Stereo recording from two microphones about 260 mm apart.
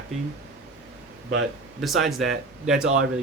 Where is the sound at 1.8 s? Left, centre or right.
Centre.